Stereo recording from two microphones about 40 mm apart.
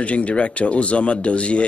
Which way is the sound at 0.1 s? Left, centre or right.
Left.